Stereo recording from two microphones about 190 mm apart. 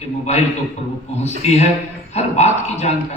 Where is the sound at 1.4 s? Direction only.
35° left (ahead or behind).